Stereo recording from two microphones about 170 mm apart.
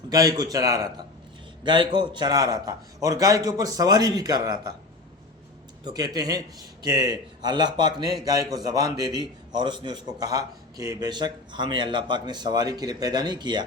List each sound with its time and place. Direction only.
0.1 s a man's voice: 20° right (ahead or behind)
5.8 s a man's voice: 20° right (ahead or behind)